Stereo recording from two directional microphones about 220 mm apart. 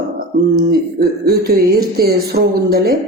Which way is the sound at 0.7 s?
45° right (ahead or behind).